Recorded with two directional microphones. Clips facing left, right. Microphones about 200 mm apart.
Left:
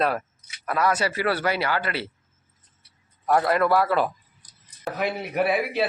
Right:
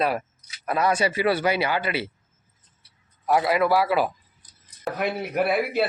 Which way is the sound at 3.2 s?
5° right (ahead or behind).